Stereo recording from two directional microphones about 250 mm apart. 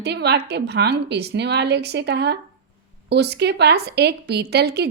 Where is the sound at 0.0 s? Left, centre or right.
Right.